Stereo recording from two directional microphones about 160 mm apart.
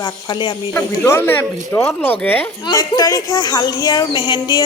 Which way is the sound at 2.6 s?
25° left (ahead or behind).